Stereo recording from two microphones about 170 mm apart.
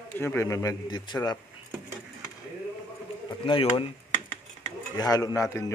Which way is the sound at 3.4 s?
30° left (ahead or behind).